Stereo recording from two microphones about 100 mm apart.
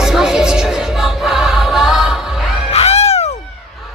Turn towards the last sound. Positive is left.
turn(degrees=90)